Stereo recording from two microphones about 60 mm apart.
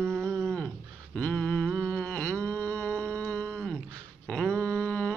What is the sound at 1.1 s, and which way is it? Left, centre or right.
Mantra, centre.